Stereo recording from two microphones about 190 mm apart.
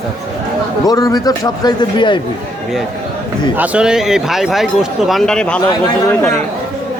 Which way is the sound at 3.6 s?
5° right (ahead or behind).